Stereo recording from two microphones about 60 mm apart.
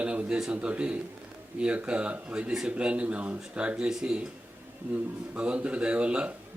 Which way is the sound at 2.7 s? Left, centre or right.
Centre.